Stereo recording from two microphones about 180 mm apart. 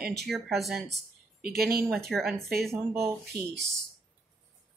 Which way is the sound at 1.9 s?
Centre (ahead or behind).